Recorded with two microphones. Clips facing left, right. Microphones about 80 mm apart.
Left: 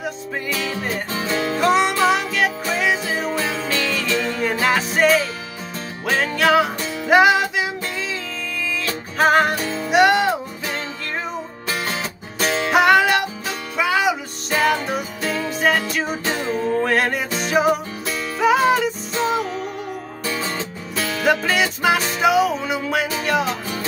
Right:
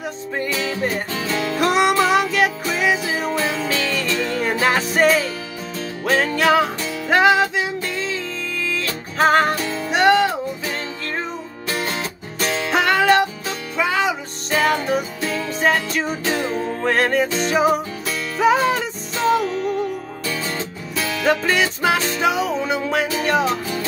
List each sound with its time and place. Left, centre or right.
1.2 s music: left
1.6 s music: centre
7.1 s music: centre
9.2 s music: centre
12.7 s music: centre
21.3 s music: centre